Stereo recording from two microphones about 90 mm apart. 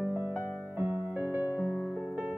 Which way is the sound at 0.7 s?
20° right (ahead or behind).